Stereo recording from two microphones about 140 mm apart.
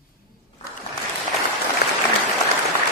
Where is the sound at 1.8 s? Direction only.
90° left.